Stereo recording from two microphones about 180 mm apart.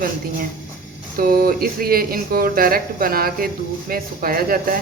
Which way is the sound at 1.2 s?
55° right (ahead or behind).